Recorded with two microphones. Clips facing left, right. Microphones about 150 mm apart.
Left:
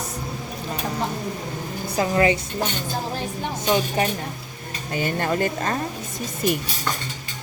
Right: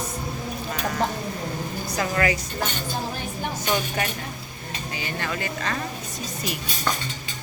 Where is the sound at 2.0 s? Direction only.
25° left (ahead or behind).